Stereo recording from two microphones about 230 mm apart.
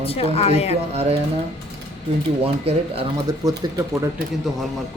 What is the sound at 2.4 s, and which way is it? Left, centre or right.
Speech, right.